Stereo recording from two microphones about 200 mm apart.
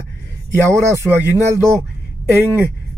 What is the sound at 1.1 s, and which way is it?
Speech, 5° left (ahead or behind).